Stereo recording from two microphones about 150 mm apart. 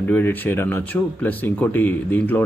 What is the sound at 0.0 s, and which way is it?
Speech, 10° left (ahead or behind).